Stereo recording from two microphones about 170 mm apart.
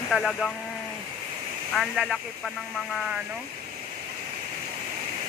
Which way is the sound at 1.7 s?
Centre (ahead or behind).